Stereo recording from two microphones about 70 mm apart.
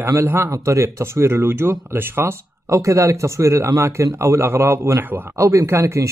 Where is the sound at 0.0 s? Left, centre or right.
Right.